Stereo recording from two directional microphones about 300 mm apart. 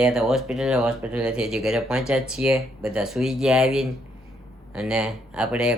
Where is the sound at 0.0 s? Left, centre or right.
Centre.